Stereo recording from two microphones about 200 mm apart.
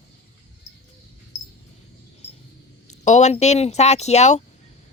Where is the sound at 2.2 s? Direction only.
30° left (ahead or behind).